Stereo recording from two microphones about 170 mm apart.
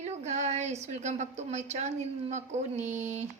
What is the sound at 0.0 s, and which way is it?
A woman's voice, 40° right (ahead or behind).